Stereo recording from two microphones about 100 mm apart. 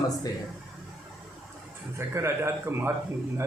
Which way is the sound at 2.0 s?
25° right (ahead or behind).